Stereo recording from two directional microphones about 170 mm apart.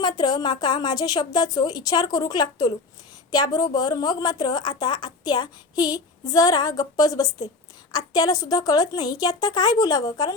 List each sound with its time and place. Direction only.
0.0 s a woman's voice: 25° left (ahead or behind)